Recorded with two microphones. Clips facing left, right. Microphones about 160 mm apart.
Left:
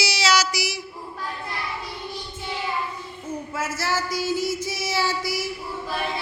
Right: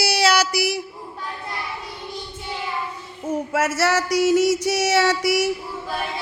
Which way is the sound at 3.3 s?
90° right.